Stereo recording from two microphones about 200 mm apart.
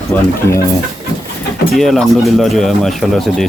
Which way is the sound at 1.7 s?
Centre (ahead or behind).